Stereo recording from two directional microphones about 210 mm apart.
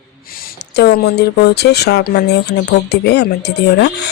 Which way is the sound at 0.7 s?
50° left (ahead or behind).